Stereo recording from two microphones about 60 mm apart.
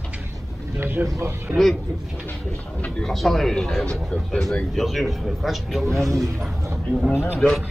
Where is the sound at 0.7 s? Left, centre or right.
Right.